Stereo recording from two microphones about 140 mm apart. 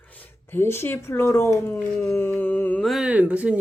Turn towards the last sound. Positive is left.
turn(degrees=-10)  # may be behind; listen again after turning